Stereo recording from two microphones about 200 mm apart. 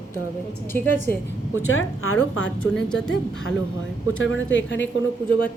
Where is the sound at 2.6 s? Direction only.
5° left (ahead or behind).